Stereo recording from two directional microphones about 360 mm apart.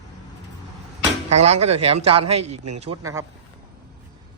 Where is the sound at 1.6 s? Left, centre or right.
Right.